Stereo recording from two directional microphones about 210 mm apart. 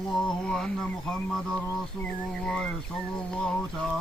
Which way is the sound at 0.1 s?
5° left (ahead or behind).